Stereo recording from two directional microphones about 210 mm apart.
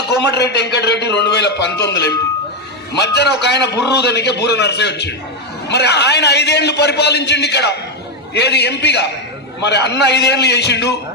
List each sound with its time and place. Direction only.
0.1 s a man's voice: 55° left (ahead or behind)